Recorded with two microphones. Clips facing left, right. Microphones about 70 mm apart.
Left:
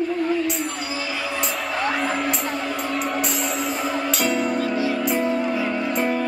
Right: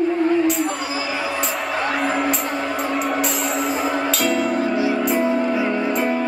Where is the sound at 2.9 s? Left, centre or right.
Centre.